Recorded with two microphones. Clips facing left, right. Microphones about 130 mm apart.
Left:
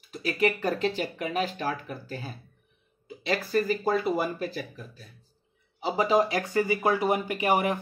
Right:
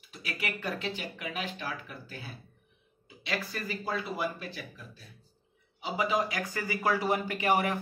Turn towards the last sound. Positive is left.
turn(degrees=20)  # may be behind; listen again after turning